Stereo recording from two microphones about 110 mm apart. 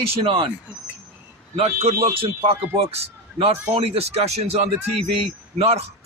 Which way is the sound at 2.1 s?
55° right (ahead or behind).